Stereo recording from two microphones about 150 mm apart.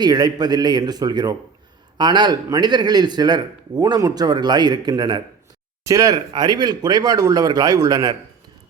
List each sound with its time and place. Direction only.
0.0 s a man's voice: 25° right (ahead or behind)